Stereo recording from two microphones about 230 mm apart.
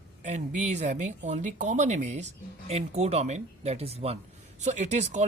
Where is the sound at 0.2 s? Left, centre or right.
Right.